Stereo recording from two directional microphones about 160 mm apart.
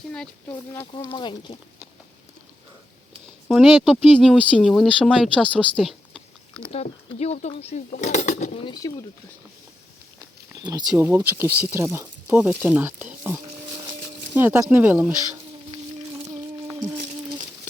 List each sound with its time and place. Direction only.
0.1 s speech: 5° left (ahead or behind)
1.1 s speech: 30° left (ahead or behind)
3.5 s speech: centre (ahead or behind)
6.7 s speech: 40° left (ahead or behind)
8.6 s speech: 25° left (ahead or behind)
10.6 s speech: 25° right (ahead or behind)
10.9 s speech: 15° right (ahead or behind)
16.6 s a sound: 25° right (ahead or behind)